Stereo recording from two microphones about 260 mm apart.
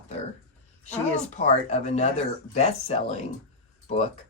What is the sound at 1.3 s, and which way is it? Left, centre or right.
Speech, left.